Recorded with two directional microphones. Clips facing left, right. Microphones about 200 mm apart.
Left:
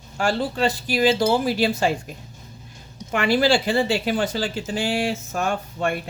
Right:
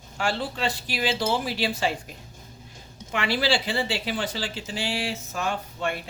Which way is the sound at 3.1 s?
45° left (ahead or behind).